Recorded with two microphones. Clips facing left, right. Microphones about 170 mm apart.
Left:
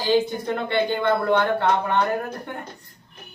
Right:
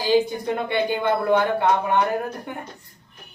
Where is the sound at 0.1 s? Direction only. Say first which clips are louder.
Right 1 dB; 15° right (ahead or behind).